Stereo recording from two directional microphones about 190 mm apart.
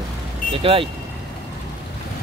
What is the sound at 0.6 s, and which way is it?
Speech, 30° right (ahead or behind).